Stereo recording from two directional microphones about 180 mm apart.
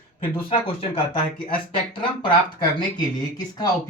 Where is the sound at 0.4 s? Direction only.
30° left (ahead or behind).